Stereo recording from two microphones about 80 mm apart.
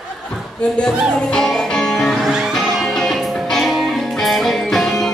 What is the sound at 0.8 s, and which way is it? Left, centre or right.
Music, centre.